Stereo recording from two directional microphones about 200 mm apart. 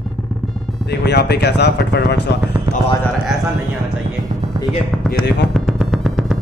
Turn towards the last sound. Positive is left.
turn(degrees=-5)  # may be behind; listen again after turning